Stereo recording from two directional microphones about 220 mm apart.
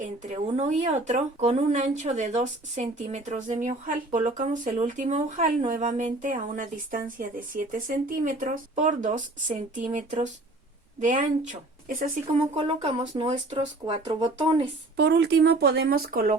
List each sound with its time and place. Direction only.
0.0 s speech: 35° right (ahead or behind)
12.5 s speech: 25° right (ahead or behind)
14.9 s speech: 50° right (ahead or behind)